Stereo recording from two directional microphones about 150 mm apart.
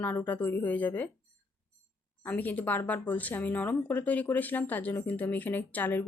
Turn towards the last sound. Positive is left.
turn(degrees=10)  # may be behind; listen again after turning